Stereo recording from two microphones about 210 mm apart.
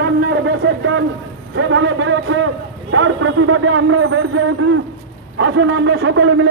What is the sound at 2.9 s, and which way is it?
A man's voice, 80° right.